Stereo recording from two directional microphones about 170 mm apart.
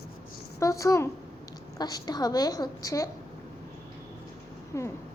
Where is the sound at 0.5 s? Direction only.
20° left (ahead or behind).